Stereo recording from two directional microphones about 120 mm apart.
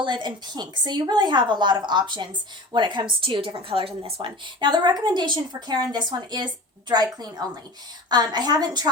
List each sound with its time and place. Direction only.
0.0 s a woman's voice: 40° right (ahead or behind)
4.6 s a woman's voice: 35° right (ahead or behind)